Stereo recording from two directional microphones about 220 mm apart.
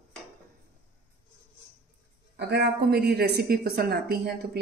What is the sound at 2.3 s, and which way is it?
Speech, 50° right (ahead or behind).